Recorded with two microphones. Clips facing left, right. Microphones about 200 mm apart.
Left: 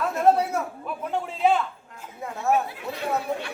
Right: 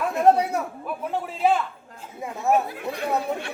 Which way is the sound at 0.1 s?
15° right (ahead or behind).